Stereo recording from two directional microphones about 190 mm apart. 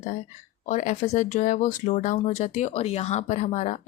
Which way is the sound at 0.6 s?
40° left (ahead or behind).